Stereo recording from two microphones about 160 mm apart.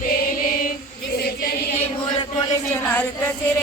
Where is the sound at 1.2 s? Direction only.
75° left (ahead or behind).